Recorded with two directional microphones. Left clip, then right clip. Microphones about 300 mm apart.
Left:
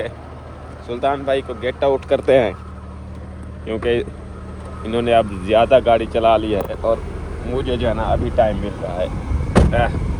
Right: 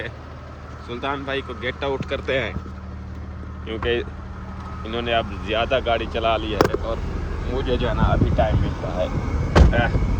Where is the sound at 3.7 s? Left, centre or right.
Centre.